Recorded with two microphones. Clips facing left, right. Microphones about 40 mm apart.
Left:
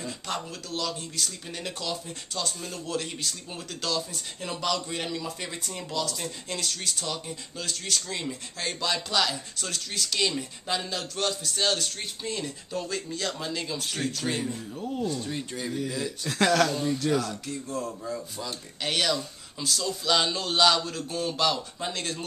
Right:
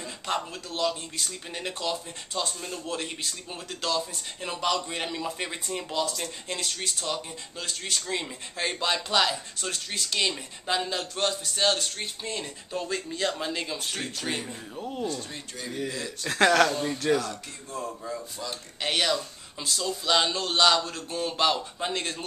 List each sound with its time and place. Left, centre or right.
0.0 s speech: centre
6.1 s speech: centre
15.0 s speech: centre
15.3 s speech: centre
16.3 s speech: centre